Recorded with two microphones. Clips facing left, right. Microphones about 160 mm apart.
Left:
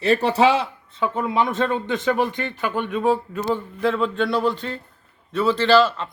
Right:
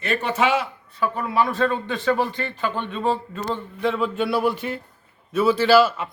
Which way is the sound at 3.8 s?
5° right (ahead or behind).